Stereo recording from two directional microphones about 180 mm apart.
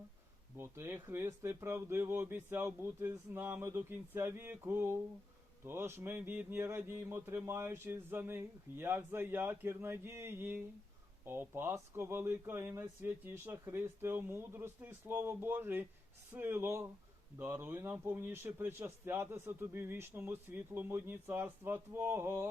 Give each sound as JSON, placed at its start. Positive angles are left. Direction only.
{"t": 0.5, "sound": "a man's voice", "side_deg": -15}